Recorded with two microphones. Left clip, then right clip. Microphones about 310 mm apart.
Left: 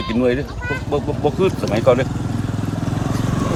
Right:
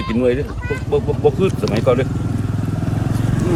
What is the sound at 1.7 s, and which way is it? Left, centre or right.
Speech, centre.